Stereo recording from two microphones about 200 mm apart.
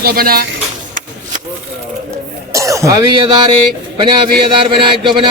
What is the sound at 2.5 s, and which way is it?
Speech, 15° right (ahead or behind).